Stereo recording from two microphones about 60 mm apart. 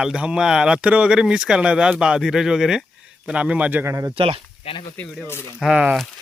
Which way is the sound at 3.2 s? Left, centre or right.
Centre.